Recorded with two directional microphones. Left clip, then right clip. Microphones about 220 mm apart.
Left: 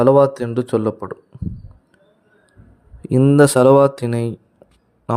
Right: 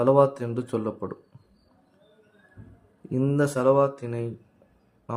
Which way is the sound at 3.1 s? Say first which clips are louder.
Left 12 dB; 45° left (ahead or behind).